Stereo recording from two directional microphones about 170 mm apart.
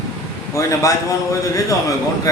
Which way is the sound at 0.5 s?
20° left (ahead or behind).